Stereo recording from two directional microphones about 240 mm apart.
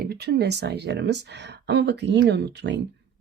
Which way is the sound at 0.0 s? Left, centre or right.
Right.